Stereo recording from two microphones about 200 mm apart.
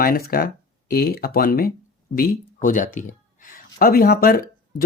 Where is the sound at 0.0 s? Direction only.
45° left (ahead or behind).